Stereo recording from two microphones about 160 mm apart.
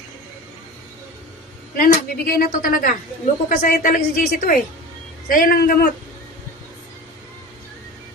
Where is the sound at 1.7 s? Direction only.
60° left (ahead or behind).